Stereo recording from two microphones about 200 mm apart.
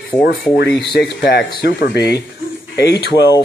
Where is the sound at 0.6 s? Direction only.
55° left (ahead or behind).